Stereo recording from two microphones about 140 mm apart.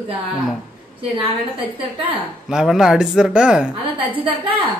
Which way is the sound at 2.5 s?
5° right (ahead or behind).